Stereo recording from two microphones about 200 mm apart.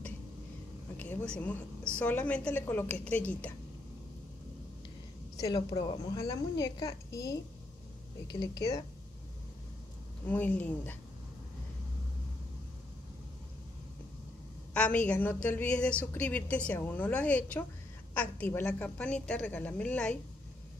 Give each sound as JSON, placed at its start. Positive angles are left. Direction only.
{"t": 0.9, "sound": "a woman's voice", "side_deg": 5}
{"t": 5.4, "sound": "a woman's voice", "side_deg": 20}
{"t": 10.2, "sound": "a woman's voice", "side_deg": 10}
{"t": 14.7, "sound": "a woman's voice", "side_deg": 5}